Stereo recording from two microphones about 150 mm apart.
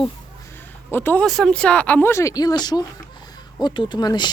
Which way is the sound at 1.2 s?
Centre (ahead or behind).